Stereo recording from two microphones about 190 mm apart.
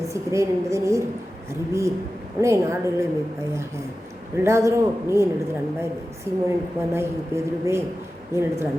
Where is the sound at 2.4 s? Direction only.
15° right (ahead or behind).